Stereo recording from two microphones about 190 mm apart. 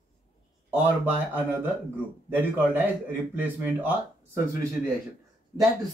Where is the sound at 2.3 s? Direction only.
10° right (ahead or behind).